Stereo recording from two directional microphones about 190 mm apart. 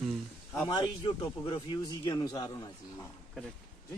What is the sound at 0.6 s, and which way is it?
Speech, 25° left (ahead or behind).